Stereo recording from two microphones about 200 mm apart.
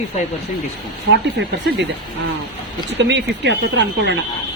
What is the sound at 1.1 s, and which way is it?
Speech, 60° right (ahead or behind).